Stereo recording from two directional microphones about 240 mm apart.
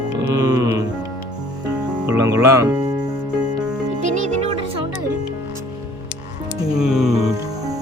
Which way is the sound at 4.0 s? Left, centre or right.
Right.